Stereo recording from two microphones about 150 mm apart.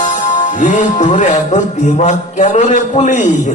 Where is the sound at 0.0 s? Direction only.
55° left (ahead or behind).